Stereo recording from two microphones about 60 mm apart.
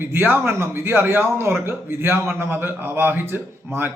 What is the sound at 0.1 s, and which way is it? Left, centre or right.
A man's voice, right.